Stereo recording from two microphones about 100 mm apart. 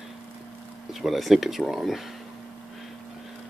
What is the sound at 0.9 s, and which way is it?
Speech, centre (ahead or behind).